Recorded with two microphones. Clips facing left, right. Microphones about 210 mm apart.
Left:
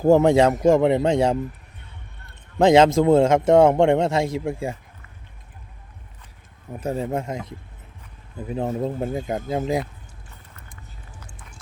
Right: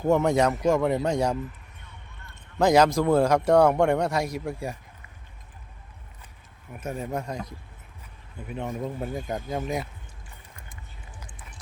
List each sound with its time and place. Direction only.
0.0 s a man's voice: 30° left (ahead or behind)
2.6 s a man's voice: 25° left (ahead or behind)
6.7 s a man's voice: 30° left (ahead or behind)
8.4 s a man's voice: 35° left (ahead or behind)